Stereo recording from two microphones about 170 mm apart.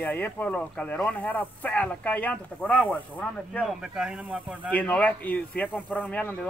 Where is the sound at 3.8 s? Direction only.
5° right (ahead or behind).